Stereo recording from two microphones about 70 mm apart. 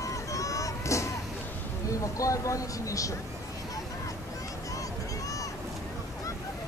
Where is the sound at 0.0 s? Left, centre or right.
Left.